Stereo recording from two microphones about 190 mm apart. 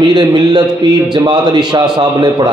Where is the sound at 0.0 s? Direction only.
25° right (ahead or behind).